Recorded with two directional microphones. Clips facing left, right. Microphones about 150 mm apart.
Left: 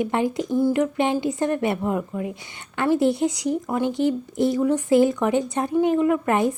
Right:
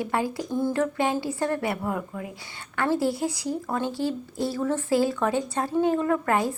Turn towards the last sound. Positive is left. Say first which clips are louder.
# left 4 dB
turn(degrees=20)  # may be behind; listen again after turning